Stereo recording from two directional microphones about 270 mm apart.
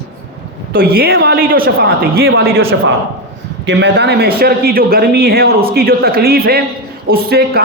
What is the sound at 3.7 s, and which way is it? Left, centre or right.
A man's voice, right.